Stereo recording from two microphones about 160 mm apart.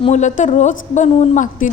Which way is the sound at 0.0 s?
45° left (ahead or behind).